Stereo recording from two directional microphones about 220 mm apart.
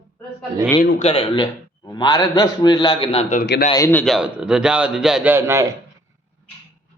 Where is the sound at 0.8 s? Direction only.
30° left (ahead or behind).